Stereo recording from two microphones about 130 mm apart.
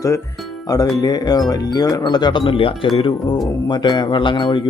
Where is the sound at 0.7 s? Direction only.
25° left (ahead or behind).